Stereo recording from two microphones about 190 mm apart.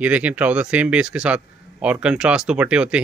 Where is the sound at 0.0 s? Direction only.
5° right (ahead or behind).